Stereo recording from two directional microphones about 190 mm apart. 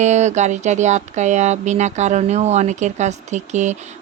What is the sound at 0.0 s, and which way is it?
Speech, 40° right (ahead or behind).